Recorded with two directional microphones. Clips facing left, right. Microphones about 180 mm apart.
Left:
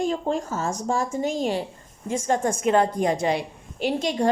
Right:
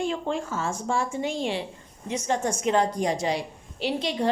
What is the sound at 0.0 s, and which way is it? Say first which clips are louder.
A woman's voice: left 3 dB; 40° left (ahead or behind).